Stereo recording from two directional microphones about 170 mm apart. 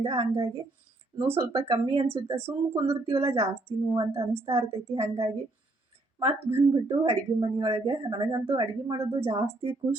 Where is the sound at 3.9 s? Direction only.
15° right (ahead or behind).